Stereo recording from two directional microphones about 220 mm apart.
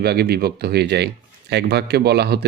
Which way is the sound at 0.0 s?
45° right (ahead or behind).